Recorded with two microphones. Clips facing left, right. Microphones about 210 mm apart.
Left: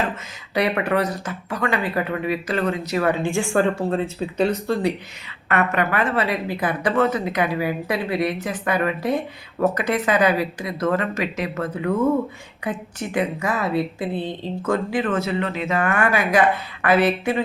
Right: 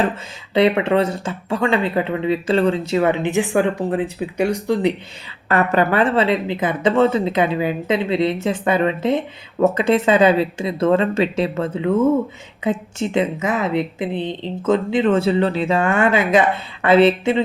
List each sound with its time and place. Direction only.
0.5 s speech: 25° right (ahead or behind)
5.5 s speech: 35° right (ahead or behind)